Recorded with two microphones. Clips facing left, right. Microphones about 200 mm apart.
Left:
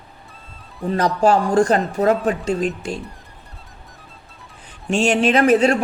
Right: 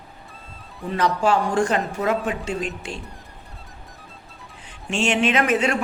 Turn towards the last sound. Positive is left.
turn(degrees=35)  # may be behind; listen again after turning